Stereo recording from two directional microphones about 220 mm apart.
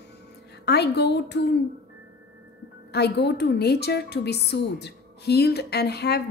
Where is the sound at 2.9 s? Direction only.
50° left (ahead or behind).